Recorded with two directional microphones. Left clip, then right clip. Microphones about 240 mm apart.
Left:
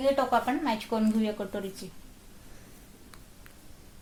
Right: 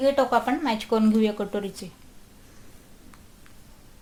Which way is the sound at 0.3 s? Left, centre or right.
Right.